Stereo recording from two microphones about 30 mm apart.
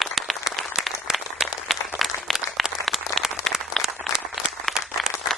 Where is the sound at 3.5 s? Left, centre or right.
Right.